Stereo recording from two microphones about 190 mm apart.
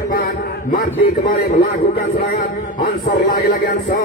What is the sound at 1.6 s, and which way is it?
Speech, 50° left (ahead or behind).